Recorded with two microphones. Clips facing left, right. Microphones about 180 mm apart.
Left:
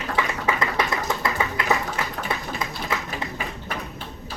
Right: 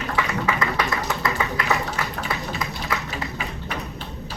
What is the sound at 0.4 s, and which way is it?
Music, 25° left (ahead or behind).